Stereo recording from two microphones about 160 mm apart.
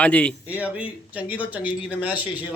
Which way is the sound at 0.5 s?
10° right (ahead or behind).